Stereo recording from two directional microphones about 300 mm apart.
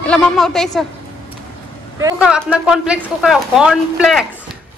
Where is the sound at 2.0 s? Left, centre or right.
Centre.